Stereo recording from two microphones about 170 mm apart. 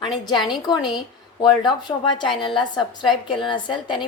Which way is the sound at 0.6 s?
25° left (ahead or behind).